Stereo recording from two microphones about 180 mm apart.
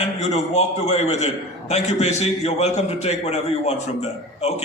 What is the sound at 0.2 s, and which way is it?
A man's voice, 40° left (ahead or behind).